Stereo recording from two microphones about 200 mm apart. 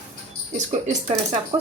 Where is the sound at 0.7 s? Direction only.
35° right (ahead or behind).